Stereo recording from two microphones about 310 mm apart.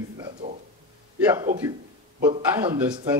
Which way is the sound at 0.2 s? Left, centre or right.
Right.